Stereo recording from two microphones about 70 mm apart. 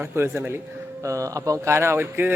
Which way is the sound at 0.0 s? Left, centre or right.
Right.